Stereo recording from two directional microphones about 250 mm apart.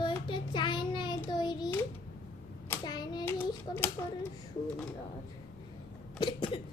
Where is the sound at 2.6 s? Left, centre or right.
Centre.